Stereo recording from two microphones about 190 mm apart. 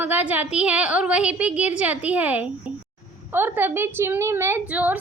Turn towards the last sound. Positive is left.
turn(degrees=-5)  # may be behind; listen again after turning